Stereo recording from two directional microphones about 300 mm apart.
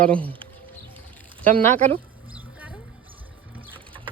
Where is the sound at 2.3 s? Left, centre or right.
Centre.